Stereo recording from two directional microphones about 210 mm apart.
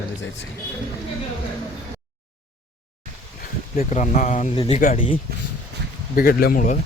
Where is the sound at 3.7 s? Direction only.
35° left (ahead or behind).